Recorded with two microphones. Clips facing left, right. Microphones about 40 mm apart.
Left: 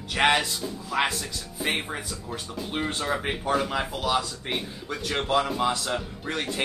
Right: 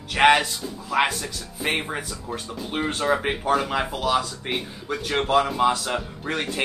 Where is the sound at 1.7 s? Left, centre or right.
Centre.